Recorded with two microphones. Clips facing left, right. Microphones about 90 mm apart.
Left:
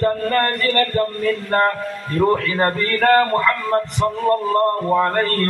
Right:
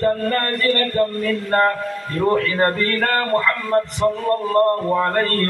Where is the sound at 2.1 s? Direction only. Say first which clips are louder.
Left 1 dB; 20° left (ahead or behind).